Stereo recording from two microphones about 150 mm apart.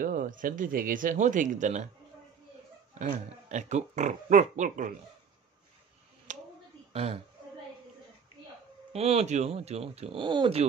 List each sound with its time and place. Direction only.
0.0 s speech: 65° right (ahead or behind)
2.9 s speech: 55° right (ahead or behind)
6.3 s a sound: 55° right (ahead or behind)
6.9 s speech: 40° right (ahead or behind)
8.9 s speech: 45° right (ahead or behind)